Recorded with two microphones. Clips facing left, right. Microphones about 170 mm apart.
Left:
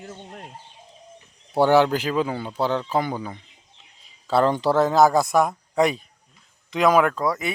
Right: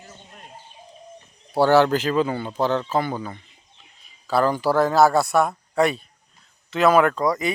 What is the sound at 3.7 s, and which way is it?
Bird, 90° left.